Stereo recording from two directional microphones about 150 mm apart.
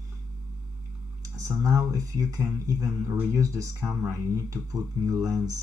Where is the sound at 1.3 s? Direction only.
20° right (ahead or behind).